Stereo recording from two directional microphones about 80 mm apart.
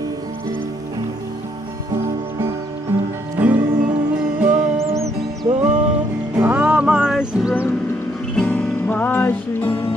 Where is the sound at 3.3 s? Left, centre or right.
Centre.